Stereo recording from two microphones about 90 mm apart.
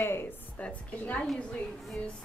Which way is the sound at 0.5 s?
15° left (ahead or behind).